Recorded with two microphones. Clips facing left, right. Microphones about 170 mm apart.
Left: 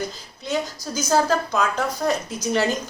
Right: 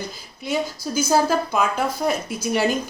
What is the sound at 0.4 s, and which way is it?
Speech, 10° right (ahead or behind).